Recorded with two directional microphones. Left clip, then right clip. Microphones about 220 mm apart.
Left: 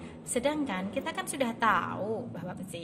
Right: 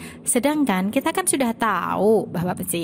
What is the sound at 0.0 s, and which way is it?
A woman's voice, 50° right (ahead or behind).